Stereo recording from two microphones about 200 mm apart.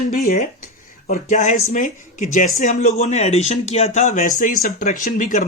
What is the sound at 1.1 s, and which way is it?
Speech, 35° left (ahead or behind).